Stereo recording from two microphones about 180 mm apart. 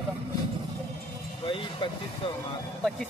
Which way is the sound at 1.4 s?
30° left (ahead or behind).